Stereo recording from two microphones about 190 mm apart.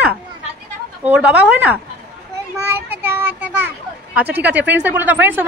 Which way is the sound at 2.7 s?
10° right (ahead or behind).